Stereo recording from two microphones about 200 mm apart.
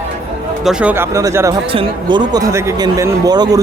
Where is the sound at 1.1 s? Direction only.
15° right (ahead or behind).